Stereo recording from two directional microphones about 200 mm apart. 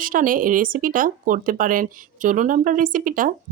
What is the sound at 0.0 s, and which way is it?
Speech, 45° right (ahead or behind).